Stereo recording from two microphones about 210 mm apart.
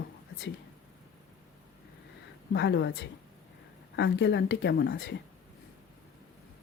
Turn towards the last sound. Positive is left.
turn(degrees=60)  # may be behind; listen again after turning